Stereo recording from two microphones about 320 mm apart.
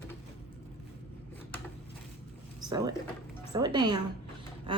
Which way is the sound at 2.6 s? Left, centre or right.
Centre.